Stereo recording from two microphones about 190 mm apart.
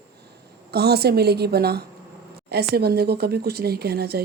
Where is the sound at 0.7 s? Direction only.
55° right (ahead or behind).